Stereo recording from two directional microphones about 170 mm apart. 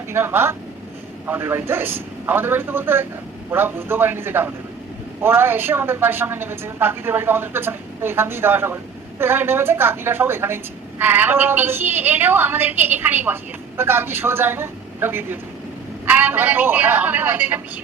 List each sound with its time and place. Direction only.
0.1 s a woman's voice: 15° right (ahead or behind)